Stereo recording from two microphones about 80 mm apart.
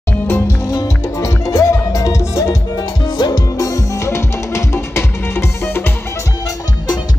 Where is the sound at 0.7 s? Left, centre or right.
Left.